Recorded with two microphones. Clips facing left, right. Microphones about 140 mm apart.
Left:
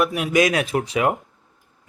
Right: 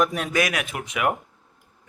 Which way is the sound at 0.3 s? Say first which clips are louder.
Left 6 dB; 25° left (ahead or behind).